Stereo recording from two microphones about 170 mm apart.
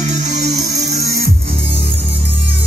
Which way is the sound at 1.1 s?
65° right (ahead or behind).